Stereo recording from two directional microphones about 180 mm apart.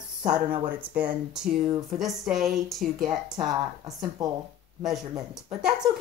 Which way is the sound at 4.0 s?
20° right (ahead or behind).